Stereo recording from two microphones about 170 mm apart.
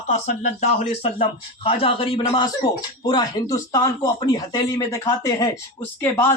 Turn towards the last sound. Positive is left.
turn(degrees=10)  # may be behind; listen again after turning